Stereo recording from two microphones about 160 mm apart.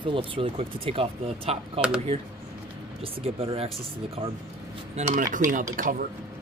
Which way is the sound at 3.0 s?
35° right (ahead or behind).